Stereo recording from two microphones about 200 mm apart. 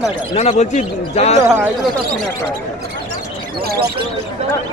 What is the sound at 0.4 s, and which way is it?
A man's voice, 35° left (ahead or behind).